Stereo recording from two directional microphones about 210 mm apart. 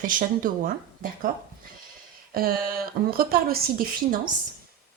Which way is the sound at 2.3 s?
45° right (ahead or behind).